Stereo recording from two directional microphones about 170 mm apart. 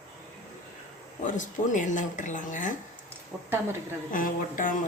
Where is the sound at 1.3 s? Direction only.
50° left (ahead or behind).